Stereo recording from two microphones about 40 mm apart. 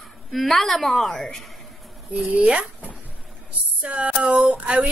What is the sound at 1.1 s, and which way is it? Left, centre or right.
Speech, centre.